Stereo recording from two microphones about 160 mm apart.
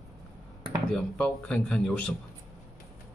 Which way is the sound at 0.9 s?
5° left (ahead or behind).